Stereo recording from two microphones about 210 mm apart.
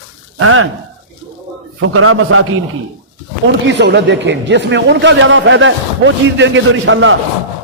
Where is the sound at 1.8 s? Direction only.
80° right.